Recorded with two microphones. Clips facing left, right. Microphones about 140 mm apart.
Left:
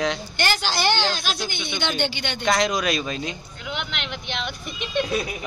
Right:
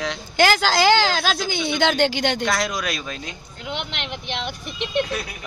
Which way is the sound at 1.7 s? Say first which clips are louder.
Right 7 dB; 90° right.